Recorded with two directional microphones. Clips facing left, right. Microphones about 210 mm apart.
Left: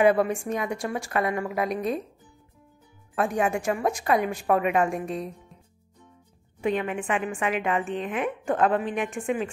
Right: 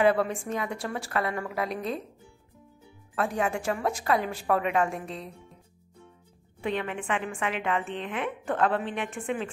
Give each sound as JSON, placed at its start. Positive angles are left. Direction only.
{"t": 0.0, "sound": "a woman's voice", "side_deg": 15}
{"t": 3.2, "sound": "a woman's voice", "side_deg": 15}
{"t": 6.6, "sound": "a woman's voice", "side_deg": 15}